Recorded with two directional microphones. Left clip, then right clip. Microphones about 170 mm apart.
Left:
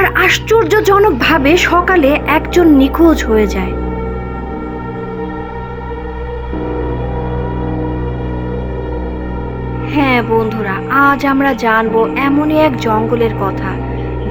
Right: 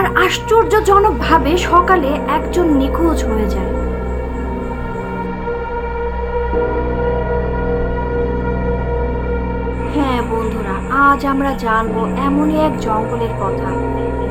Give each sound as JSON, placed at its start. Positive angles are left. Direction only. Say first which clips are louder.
{"t": 0.0, "sound": "speech", "louder": "left 3 dB", "side_deg": 35}
{"t": 9.9, "sound": "music", "louder": "left 6 dB", "side_deg": 35}
{"t": 10.7, "sound": "speech", "louder": "left 1 dB", "side_deg": 35}